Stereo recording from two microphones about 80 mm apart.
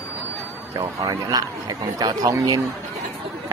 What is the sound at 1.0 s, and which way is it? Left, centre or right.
Speech, right.